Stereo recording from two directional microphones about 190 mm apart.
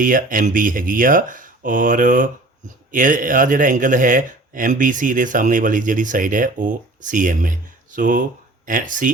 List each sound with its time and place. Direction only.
0.0 s speech: 45° right (ahead or behind)